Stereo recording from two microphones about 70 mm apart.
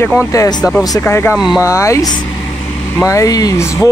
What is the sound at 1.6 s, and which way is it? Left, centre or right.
Speech, left.